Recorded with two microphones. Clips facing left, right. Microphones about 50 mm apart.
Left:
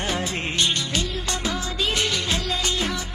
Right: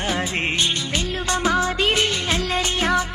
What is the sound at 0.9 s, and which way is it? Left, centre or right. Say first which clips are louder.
Music: right 4 dB; right.